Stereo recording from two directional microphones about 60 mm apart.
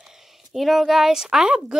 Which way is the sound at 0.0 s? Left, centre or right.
Centre.